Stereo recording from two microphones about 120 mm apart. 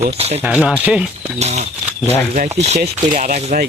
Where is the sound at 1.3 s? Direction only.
65° right (ahead or behind).